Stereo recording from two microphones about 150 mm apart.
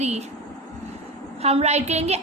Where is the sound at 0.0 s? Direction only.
45° right (ahead or behind).